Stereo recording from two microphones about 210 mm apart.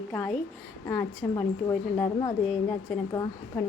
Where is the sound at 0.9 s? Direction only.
10° left (ahead or behind).